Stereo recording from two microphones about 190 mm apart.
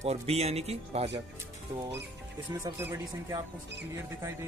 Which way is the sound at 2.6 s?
15° right (ahead or behind).